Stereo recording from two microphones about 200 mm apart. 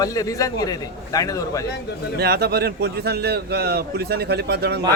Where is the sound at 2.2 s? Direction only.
50° right (ahead or behind).